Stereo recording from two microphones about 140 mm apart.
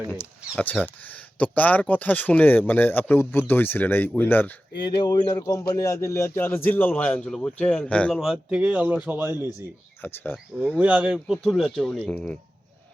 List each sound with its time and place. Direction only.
0.1 s speech: 10° left (ahead or behind)
4.8 s speech: 30° left (ahead or behind); by 8.2 s 10° left (ahead or behind)
8.2 s speech: 5° right (ahead or behind)
10.0 s speech: 15° left (ahead or behind)
10.8 s speech: 10° right (ahead or behind); by 12.4 s 10° left (ahead or behind)